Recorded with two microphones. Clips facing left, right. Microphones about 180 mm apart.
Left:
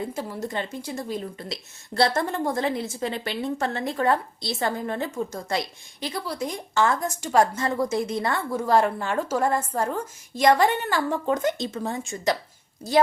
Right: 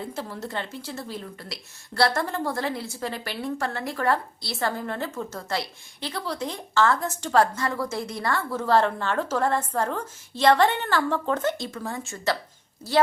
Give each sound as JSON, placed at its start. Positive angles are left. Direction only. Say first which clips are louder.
{"t": 0.1, "sound": "speech", "louder": "left 2 dB", "side_deg": 10}